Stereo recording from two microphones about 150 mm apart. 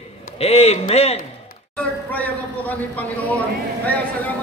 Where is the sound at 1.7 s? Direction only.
10° left (ahead or behind).